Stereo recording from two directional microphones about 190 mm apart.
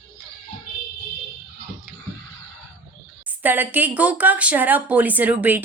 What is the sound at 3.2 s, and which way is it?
Speech, 10° right (ahead or behind).